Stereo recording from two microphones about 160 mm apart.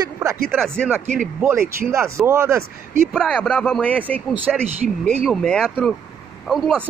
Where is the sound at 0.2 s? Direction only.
15° right (ahead or behind).